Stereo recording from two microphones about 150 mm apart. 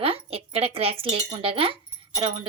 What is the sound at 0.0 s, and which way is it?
Chink, 40° right (ahead or behind).